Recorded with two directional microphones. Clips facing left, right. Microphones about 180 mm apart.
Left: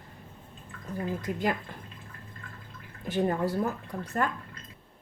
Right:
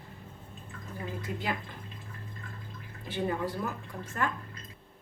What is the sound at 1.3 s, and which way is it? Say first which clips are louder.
Speech: left 4 dB; 55° left (ahead or behind).